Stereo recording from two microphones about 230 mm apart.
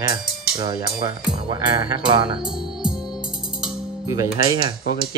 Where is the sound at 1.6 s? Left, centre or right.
Centre.